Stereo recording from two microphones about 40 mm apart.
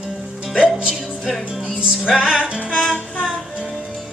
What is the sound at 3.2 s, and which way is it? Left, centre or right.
Music, centre.